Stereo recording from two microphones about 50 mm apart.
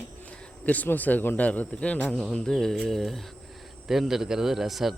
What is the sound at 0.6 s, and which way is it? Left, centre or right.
Speech, left.